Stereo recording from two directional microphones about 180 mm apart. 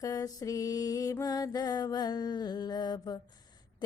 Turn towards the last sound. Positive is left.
turn(degrees=20)  # may be behind; listen again after turning